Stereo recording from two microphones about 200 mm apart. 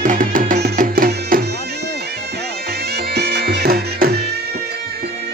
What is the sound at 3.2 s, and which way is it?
Music, 50° right (ahead or behind).